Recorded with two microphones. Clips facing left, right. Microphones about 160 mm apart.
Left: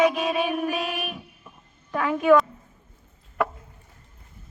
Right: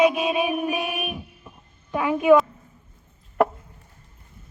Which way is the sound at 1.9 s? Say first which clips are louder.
Right 2 dB; 10° right (ahead or behind).